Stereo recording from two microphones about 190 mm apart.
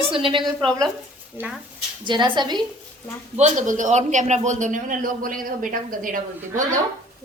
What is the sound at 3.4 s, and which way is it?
A man's voice, 40° right (ahead or behind).